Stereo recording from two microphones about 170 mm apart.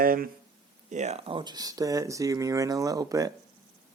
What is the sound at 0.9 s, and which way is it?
Speech, 40° right (ahead or behind).